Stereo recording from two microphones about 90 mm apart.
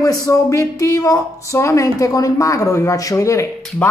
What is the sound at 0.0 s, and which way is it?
Speech, 40° left (ahead or behind).